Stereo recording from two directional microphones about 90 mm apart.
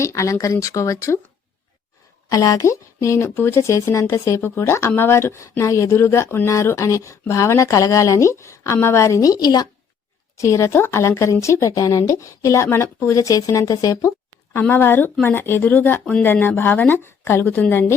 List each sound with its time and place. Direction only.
0.0 s speech: 35° left (ahead or behind)
2.3 s speech: 40° left (ahead or behind)
10.3 s speech: 35° left (ahead or behind)
14.7 s a woman's voice: 25° left (ahead or behind)